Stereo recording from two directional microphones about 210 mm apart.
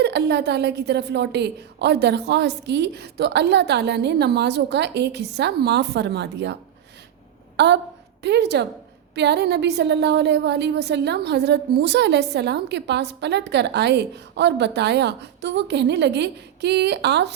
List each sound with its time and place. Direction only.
0.0 s a woman's voice: 55° right (ahead or behind)